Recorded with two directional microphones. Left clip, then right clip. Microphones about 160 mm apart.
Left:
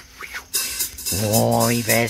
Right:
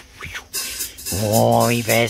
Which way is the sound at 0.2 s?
Centre (ahead or behind).